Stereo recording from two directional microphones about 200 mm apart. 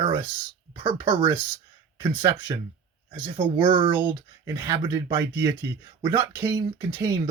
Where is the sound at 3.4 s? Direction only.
25° right (ahead or behind).